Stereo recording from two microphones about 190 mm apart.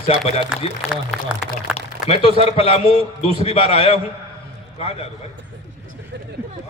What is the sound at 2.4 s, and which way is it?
A man's voice, 30° left (ahead or behind).